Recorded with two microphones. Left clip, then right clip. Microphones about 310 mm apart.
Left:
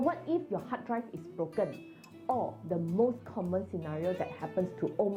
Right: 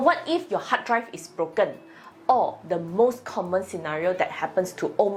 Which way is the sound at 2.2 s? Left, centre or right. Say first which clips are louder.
Right 12 dB; right.